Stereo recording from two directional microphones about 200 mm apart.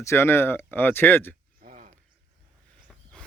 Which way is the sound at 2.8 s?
5° left (ahead or behind).